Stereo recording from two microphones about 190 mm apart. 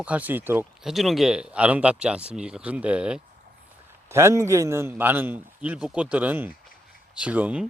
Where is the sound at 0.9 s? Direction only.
Centre (ahead or behind).